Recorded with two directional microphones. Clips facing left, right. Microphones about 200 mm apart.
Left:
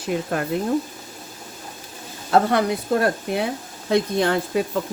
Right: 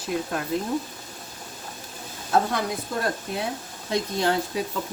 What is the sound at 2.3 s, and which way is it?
Speech, 70° left (ahead or behind).